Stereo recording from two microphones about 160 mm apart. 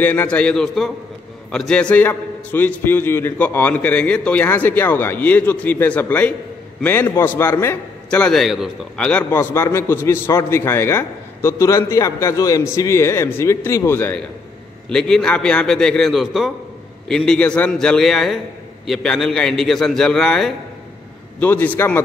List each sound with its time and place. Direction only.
0.0 s a man's voice: 10° left (ahead or behind)
9.3 s a man's voice: 15° left (ahead or behind)